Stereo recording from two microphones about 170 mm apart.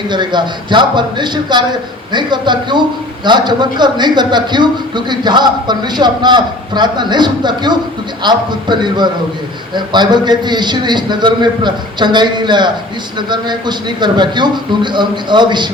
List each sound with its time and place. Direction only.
0.1 s a man's voice: 25° right (ahead or behind)